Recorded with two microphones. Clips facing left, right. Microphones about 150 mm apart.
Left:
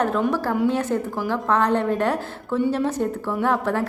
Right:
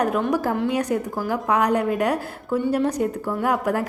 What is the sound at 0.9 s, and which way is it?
A woman's voice, 10° right (ahead or behind).